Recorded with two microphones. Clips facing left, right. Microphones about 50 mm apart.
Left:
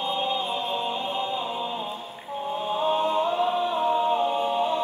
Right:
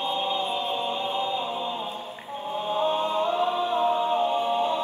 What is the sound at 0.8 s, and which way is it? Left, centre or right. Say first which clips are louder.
Music: right 1 dB; centre.